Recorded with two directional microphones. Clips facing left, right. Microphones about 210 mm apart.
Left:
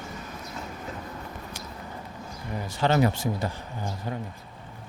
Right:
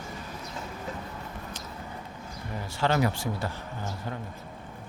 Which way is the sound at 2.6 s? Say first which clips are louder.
Left 3 dB; 20° left (ahead or behind).